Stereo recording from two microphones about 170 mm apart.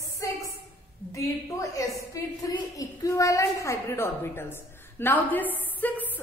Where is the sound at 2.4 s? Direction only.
20° left (ahead or behind).